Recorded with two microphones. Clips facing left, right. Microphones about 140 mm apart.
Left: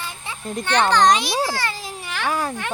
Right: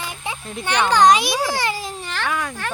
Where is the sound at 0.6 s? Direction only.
10° right (ahead or behind).